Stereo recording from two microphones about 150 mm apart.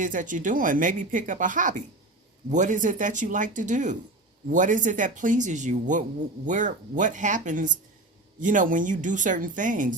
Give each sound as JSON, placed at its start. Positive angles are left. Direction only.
{"t": 0.0, "sound": "speech", "side_deg": -60}